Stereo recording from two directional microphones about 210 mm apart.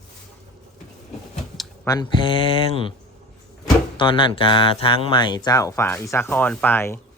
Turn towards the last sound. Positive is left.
turn(degrees=10)  # may be behind; listen again after turning